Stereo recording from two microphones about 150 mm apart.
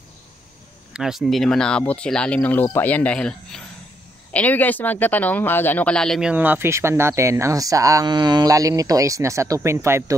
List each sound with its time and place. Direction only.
0.9 s speech: 5° right (ahead or behind)
6.3 s speech: 15° right (ahead or behind)